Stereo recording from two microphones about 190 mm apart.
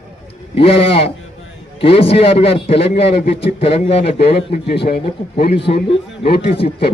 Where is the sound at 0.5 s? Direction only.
30° left (ahead or behind).